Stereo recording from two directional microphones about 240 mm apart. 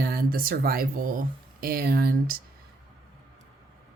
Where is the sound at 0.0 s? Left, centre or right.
Right.